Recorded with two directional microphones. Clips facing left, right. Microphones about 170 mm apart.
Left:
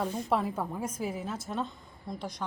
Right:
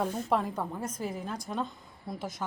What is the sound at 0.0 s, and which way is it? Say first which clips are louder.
A woman's voice: even; centre (ahead or behind).